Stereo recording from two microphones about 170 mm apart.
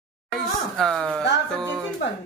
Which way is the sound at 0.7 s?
5° left (ahead or behind).